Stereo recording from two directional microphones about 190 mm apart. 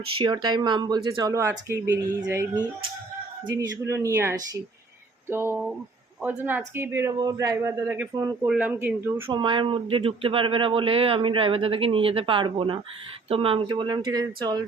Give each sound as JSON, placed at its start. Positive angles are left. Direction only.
{"t": 0.2, "sound": "a man's voice", "side_deg": -25}
{"t": 8.4, "sound": "a man's voice", "side_deg": -10}
{"t": 9.3, "sound": "speech", "side_deg": -25}